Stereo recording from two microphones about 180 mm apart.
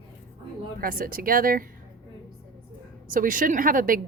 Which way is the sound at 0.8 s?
50° right (ahead or behind).